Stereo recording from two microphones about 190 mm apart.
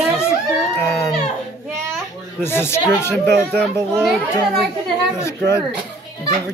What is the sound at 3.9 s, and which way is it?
Speech, centre (ahead or behind).